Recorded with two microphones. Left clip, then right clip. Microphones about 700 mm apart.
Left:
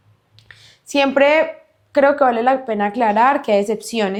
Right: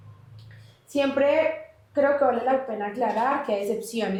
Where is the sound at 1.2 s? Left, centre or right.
Left.